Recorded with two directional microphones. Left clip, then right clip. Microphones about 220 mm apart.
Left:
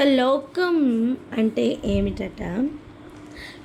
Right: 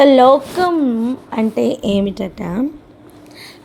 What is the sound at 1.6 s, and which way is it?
Speech, 35° right (ahead or behind).